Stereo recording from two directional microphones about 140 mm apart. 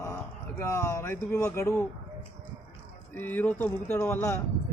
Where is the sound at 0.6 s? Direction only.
20° left (ahead or behind).